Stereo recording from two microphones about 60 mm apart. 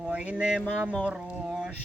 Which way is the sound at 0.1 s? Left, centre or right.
Centre.